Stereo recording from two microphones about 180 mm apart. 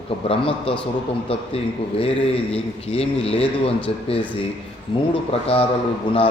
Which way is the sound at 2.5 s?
35° left (ahead or behind).